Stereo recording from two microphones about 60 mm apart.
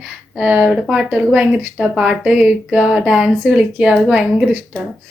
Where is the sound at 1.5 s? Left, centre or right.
Centre.